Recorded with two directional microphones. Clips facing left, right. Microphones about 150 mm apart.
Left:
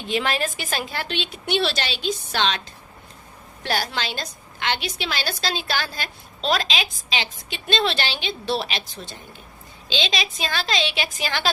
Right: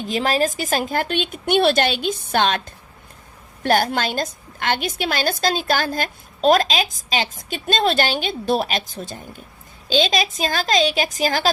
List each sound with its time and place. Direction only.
0.0 s a woman's voice: 40° right (ahead or behind)
3.6 s a woman's voice: 50° right (ahead or behind)